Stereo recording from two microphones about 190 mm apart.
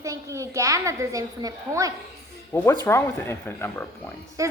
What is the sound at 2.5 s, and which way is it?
Speech, 10° left (ahead or behind).